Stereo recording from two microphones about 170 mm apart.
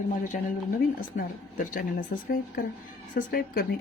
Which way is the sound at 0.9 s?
55° left (ahead or behind).